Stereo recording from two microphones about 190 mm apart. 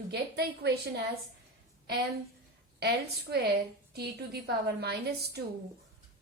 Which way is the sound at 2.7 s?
60° right (ahead or behind).